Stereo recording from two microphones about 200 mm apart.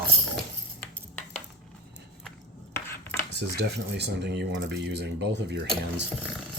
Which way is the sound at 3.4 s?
55° right (ahead or behind).